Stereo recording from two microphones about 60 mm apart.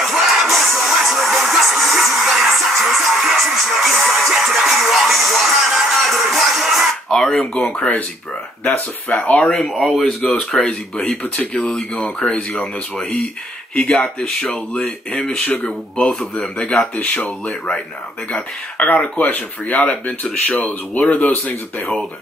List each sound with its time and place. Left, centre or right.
0.0 s music: centre
7.1 s speech: centre
9.2 s speech: left
9.5 s speech: centre
13.7 s speech: centre
15.4 s speech: left
16.0 s speech: centre
16.9 s speech: left
18.9 s speech: left